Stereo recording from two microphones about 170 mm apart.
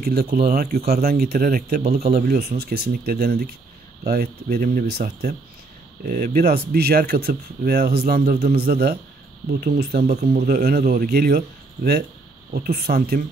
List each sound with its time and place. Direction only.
0.0 s speech: 65° right (ahead or behind)
10.1 s speech: 40° right (ahead or behind)
10.5 s speech: 60° right (ahead or behind)